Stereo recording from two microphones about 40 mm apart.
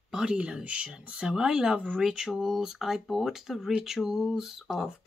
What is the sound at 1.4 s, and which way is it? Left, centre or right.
Speech, centre.